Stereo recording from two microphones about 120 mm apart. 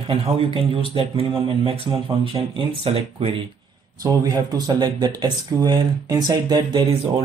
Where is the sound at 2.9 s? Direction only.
45° right (ahead or behind).